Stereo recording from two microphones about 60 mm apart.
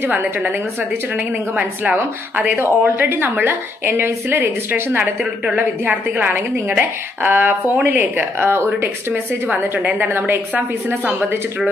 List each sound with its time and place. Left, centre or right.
0.0 s a woman's voice: right
5.6 s a woman's voice: right